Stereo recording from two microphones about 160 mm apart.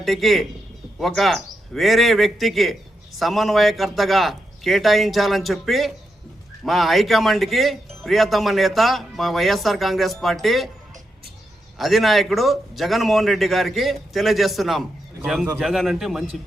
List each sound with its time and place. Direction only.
0.0 s speech: centre (ahead or behind)
11.8 s speech: centre (ahead or behind)